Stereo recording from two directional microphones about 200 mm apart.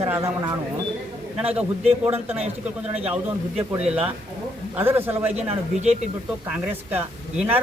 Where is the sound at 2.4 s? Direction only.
30° right (ahead or behind).